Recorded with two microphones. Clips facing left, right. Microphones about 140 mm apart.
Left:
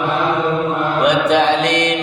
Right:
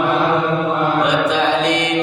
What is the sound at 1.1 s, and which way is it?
Mantra, 65° left (ahead or behind).